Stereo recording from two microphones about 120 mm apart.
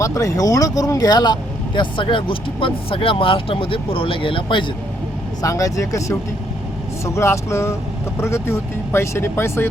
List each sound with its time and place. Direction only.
0.0 s speech: 25° left (ahead or behind); by 4.6 s 45° left (ahead or behind)
5.4 s speech: 30° left (ahead or behind)